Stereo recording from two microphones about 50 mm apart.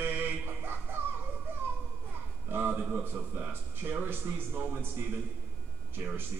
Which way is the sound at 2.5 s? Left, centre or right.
Right.